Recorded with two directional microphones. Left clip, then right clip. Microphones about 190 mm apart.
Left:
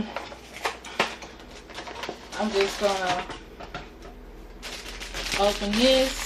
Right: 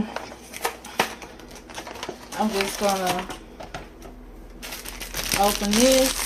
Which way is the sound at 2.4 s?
45° right (ahead or behind).